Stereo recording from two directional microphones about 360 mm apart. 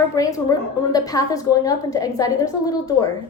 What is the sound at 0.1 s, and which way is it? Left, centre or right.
A woman's voice, centre.